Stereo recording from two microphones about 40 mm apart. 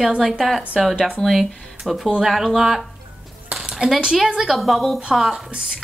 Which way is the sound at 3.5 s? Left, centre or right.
Right.